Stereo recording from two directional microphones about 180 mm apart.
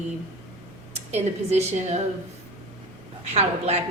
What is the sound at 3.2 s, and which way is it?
Speech, 35° right (ahead or behind).